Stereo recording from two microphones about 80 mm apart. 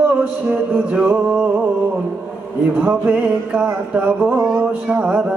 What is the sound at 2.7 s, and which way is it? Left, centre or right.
Music, centre.